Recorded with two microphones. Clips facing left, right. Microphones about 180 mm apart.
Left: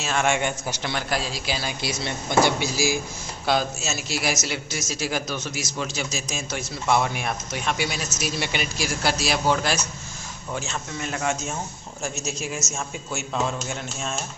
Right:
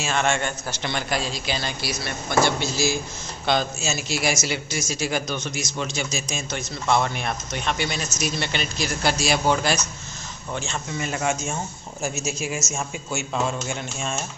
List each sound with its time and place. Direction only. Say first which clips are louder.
0.0 s speech: even; 5° left (ahead or behind)
0.9 s a man's voice: right 2 dB; 5° left (ahead or behind)
1.8 s a man's voice: left 1 dB; 25° left (ahead or behind); by 14.2 s centre (ahead or behind)